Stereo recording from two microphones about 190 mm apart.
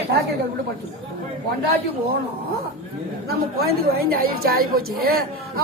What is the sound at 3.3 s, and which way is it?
A woman's voice, 55° right (ahead or behind).